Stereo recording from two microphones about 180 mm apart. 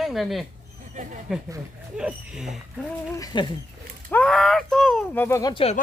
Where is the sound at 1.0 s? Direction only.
40° right (ahead or behind).